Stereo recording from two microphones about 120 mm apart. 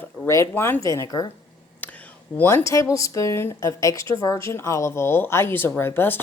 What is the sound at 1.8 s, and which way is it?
A woman's voice, 15° left (ahead or behind).